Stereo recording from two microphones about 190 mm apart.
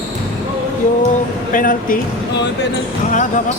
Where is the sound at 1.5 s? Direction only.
45° left (ahead or behind).